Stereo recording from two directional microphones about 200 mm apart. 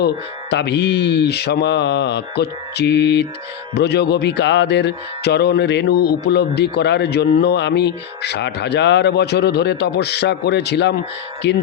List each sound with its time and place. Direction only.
0.5 s speech: 60° left (ahead or behind)